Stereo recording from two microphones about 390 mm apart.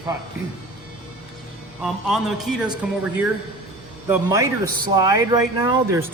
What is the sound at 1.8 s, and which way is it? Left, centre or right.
Speech, centre.